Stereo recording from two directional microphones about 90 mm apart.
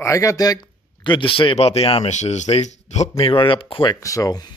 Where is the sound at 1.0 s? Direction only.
65° left (ahead or behind); by 2.6 s 90° left.